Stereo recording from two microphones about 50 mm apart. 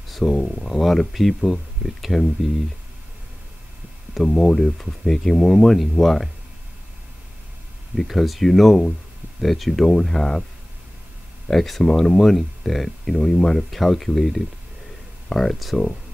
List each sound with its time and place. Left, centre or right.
0.1 s a sound: centre
0.4 s speech: centre
0.7 s speech: centre
4.1 s speech: centre
7.9 s speech: centre
11.4 s speech: centre